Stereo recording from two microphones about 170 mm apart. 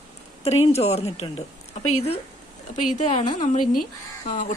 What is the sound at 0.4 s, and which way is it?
A woman's voice, 40° left (ahead or behind).